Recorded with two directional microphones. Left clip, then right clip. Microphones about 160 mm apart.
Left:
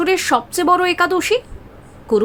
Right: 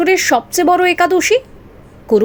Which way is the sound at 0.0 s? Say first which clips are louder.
Right 4 dB; 15° right (ahead or behind).